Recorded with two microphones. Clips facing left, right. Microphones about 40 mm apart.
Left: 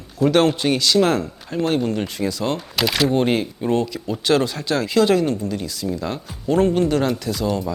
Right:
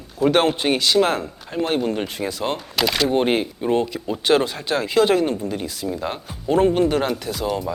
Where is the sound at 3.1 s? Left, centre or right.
Centre.